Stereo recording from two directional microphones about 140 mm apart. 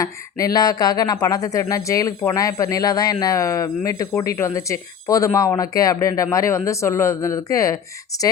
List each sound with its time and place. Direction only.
0.0 s speech: 25° left (ahead or behind)